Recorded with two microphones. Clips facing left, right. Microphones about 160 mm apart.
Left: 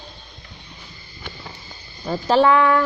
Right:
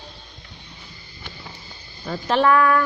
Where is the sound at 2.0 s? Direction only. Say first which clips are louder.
Left 3 dB; 30° left (ahead or behind).